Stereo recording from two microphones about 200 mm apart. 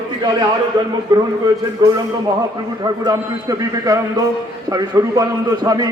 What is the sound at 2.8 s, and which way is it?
A man's voice, 20° right (ahead or behind).